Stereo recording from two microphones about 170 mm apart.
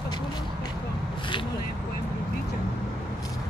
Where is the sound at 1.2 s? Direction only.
30° left (ahead or behind).